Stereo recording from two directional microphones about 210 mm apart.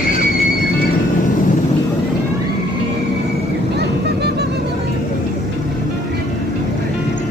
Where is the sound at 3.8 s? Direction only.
50° right (ahead or behind).